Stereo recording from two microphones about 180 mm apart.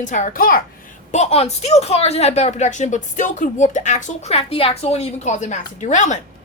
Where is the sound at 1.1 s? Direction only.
35° left (ahead or behind).